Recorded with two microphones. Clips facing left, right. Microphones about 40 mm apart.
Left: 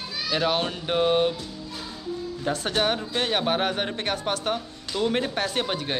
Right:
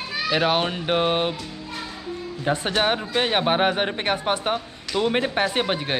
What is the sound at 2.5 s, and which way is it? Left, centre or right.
A man's voice, right.